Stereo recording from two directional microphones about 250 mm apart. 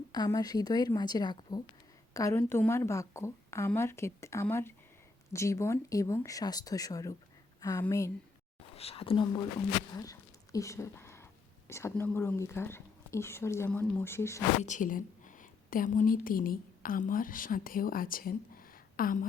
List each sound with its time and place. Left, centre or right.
0.1 s speech: centre
8.7 s speech: left
9.9 s a sound: centre
11.7 s speech: centre
14.6 s a woman's voice: left